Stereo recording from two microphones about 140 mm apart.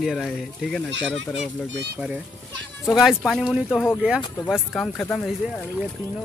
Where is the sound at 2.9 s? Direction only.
Centre (ahead or behind).